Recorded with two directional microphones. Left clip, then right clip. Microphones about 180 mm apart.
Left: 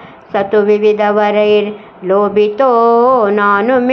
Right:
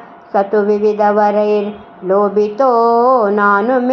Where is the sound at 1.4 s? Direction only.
30° left (ahead or behind).